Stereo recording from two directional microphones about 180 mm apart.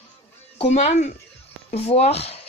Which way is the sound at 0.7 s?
40° left (ahead or behind).